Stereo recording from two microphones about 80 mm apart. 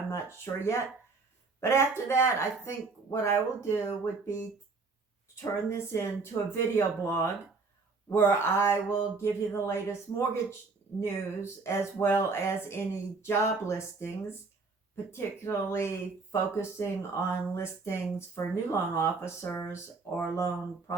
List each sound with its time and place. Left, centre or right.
0.1 s speech: left